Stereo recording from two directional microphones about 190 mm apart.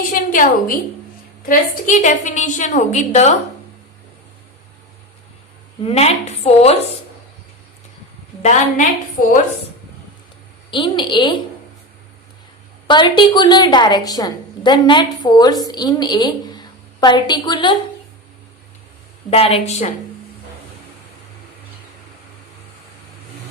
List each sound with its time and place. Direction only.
0.1 s a woman's voice: 45° left (ahead or behind)
5.8 s a woman's voice: 35° left (ahead or behind)
8.4 s a woman's voice: 40° left (ahead or behind)
10.7 s a woman's voice: 25° left (ahead or behind)
12.9 s a woman's voice: 25° left (ahead or behind)
19.3 s a woman's voice: 30° left (ahead or behind)